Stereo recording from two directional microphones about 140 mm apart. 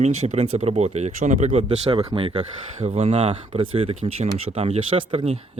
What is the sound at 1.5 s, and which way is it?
Speech, 45° right (ahead or behind).